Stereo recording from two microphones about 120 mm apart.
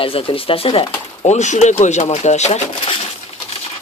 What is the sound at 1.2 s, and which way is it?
Speech, 80° left.